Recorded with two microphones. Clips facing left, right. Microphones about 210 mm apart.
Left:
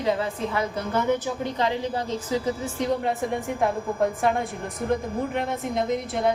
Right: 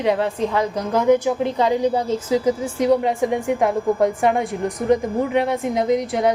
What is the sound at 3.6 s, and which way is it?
A woman's voice, 90° right.